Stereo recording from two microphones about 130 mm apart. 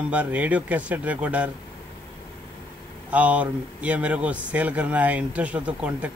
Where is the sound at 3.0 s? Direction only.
10° right (ahead or behind).